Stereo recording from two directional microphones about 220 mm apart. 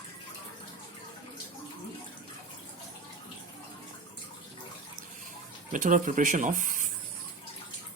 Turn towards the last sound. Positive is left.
turn(degrees=-35)  # may be behind; listen again after turning